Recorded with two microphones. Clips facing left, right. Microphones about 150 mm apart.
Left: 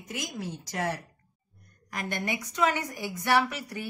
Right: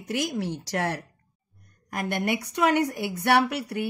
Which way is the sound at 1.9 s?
55° right (ahead or behind).